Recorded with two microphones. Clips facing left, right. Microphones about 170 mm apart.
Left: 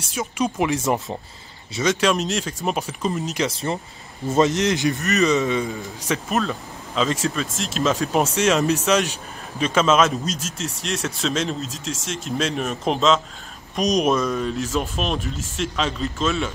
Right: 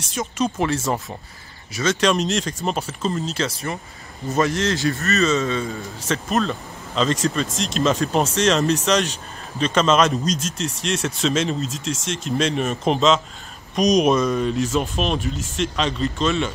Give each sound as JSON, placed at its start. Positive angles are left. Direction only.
{"t": 0.0, "sound": "speech", "side_deg": 5}